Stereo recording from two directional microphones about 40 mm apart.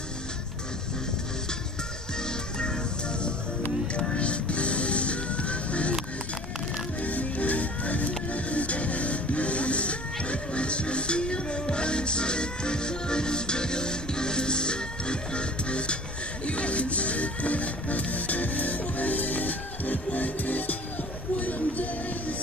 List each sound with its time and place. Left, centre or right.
2.2 s music: left
7.0 s music: left
21.4 s a sound: left